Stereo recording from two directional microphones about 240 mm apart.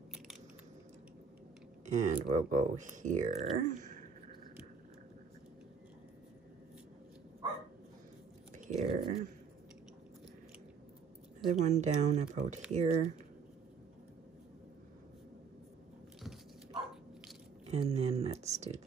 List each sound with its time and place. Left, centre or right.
1.9 s speech: right
8.5 s a sound: right
11.5 s speech: right
17.6 s speech: right